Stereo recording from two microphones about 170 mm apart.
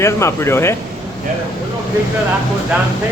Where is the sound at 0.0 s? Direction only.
15° left (ahead or behind).